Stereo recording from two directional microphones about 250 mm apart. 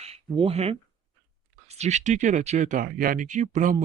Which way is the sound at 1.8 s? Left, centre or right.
Right.